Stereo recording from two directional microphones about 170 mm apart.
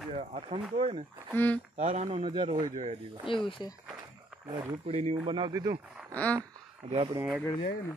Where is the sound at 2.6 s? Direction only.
45° right (ahead or behind).